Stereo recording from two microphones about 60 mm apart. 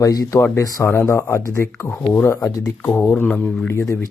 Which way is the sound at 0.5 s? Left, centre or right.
Left.